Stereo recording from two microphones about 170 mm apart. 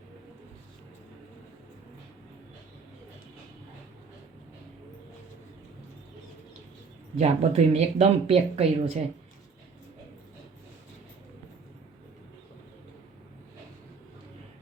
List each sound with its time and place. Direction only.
7.2 s speech: 40° right (ahead or behind)